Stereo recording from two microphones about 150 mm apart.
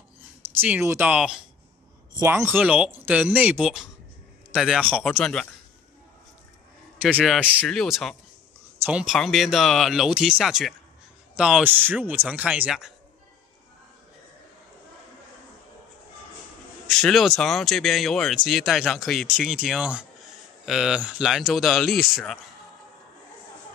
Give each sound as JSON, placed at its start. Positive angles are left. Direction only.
{"t": 0.6, "sound": "speech", "side_deg": -10}
{"t": 2.1, "sound": "speech", "side_deg": -20}
{"t": 7.0, "sound": "speech", "side_deg": -5}
{"t": 7.6, "sound": "speech", "side_deg": 5}
{"t": 16.8, "sound": "speech", "side_deg": 0}